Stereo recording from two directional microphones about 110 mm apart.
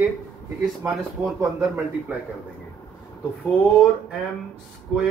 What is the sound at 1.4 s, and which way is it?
Speech, 25° right (ahead or behind).